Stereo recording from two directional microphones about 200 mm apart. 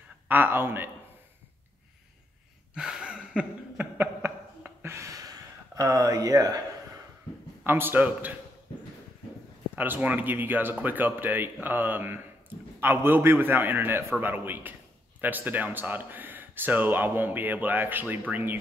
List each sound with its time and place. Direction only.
0.3 s speech: 10° right (ahead or behind)
2.7 s a sound: 5° right (ahead or behind)
7.6 s speech: 10° right (ahead or behind)
9.8 s speech: 10° right (ahead or behind)